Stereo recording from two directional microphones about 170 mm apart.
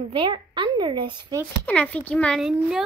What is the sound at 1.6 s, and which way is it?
Speech, 10° left (ahead or behind).